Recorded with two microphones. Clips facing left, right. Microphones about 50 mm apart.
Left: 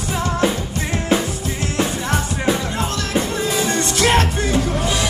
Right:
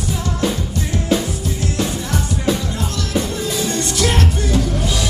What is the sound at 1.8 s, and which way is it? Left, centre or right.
Music, left.